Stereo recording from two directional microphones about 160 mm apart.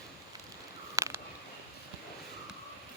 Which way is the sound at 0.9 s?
20° right (ahead or behind).